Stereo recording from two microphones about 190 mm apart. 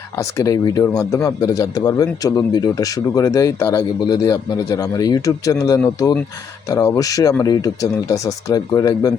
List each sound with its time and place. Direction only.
0.2 s speech: 15° left (ahead or behind)